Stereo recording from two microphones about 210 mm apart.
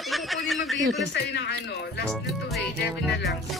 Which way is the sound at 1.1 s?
55° left (ahead or behind).